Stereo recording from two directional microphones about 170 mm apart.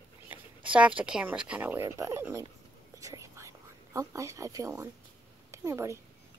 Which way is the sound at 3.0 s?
20° right (ahead or behind).